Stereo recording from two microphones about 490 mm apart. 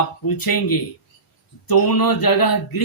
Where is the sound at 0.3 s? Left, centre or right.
Left.